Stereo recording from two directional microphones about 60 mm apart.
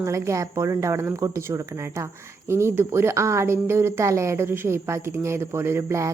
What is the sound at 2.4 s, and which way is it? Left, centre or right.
A woman's voice, right.